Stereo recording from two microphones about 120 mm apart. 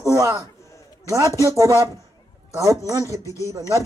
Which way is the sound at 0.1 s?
25° right (ahead or behind).